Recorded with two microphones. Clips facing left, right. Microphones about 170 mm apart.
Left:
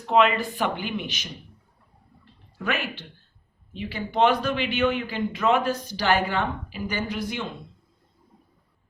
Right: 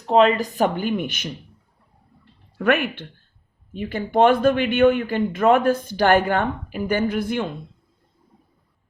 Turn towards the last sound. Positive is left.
turn(degrees=-55)  # may be behind; listen again after turning